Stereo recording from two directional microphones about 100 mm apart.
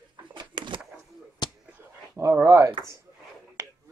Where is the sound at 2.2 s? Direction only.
30° right (ahead or behind).